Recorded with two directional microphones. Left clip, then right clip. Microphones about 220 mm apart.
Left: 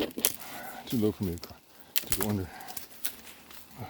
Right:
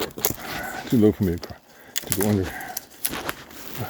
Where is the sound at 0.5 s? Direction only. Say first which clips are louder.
Right 11 dB; 30° right (ahead or behind).